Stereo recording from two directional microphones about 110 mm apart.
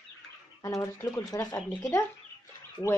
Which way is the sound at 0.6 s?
25° left (ahead or behind).